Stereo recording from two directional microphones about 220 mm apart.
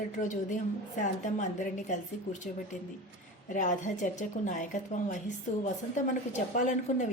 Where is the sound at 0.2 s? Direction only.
35° left (ahead or behind).